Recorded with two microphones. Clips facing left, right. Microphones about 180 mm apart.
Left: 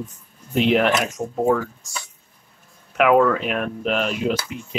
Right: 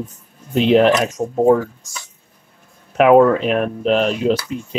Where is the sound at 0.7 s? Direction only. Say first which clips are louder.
Right 7 dB; 30° right (ahead or behind).